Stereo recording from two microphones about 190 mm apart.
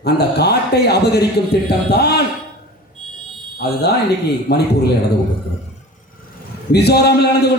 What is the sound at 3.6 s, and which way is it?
Speech, 60° left (ahead or behind).